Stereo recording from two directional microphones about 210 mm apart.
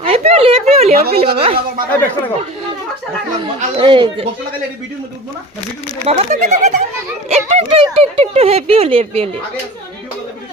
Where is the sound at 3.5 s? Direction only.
25° right (ahead or behind).